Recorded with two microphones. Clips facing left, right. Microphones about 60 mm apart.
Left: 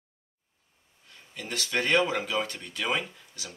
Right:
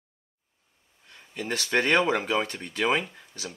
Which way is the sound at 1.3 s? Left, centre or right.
Right.